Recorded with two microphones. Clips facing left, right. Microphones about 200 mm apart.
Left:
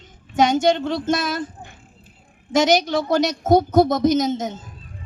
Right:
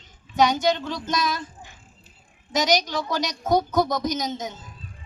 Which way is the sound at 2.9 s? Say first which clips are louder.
Left 8 dB; 55° left (ahead or behind).